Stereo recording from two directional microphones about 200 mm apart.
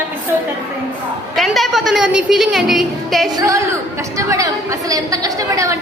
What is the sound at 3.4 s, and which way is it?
A woman's voice, 15° right (ahead or behind).